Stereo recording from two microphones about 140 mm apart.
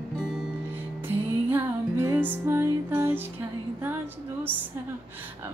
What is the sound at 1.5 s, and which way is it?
Music, 15° right (ahead or behind).